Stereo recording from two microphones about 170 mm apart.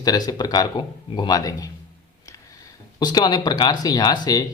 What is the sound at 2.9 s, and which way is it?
Speech, 25° left (ahead or behind).